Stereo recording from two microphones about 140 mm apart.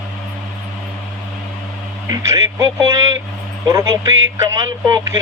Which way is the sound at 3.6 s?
20° right (ahead or behind).